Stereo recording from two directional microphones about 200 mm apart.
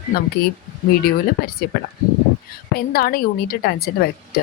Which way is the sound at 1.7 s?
45° left (ahead or behind).